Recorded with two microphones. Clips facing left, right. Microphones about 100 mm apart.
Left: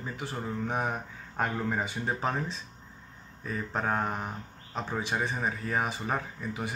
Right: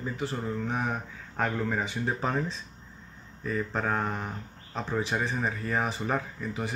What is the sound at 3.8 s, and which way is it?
Speech, 25° left (ahead or behind).